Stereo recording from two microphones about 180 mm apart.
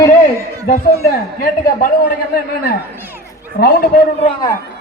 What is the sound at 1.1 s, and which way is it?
A man's voice, 55° left (ahead or behind).